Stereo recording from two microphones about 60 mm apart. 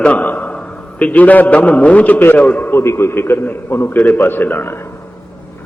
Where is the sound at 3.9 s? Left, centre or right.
Left.